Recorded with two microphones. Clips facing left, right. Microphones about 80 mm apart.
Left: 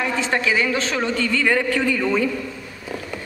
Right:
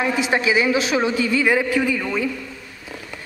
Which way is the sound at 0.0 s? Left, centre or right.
Centre.